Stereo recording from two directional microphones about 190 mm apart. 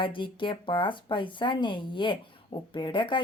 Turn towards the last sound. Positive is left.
turn(degrees=25)  # may be behind; listen again after turning